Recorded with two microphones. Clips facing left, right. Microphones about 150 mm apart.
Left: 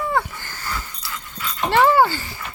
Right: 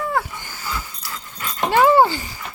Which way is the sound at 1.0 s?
45° right (ahead or behind).